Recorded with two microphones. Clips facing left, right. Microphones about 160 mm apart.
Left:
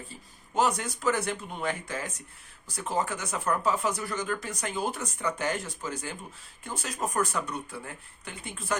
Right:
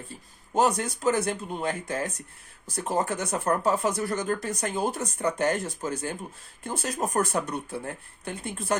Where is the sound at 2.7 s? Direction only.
45° right (ahead or behind).